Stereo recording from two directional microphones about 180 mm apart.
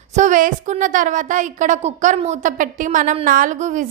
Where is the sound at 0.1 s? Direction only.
45° right (ahead or behind).